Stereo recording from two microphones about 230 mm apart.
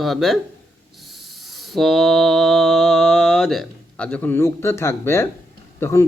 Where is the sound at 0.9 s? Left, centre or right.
Centre.